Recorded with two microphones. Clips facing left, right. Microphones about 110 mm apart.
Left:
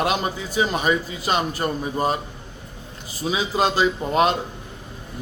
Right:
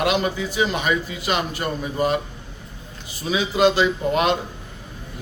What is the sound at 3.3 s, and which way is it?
A man's voice, 35° left (ahead or behind).